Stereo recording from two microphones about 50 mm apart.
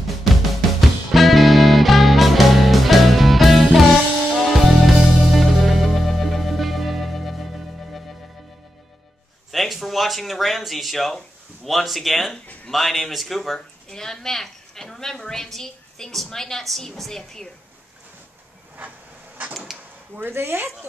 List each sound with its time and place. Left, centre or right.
0.2 s music: centre
9.5 s speech: centre
13.8 s a woman's voice: centre
18.8 s a sound: right
20.2 s speech: right